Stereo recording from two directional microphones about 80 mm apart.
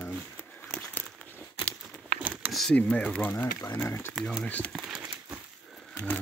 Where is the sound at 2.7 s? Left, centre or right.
Centre.